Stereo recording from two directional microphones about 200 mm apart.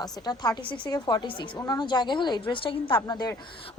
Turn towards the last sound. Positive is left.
turn(degrees=20)  # may be behind; listen again after turning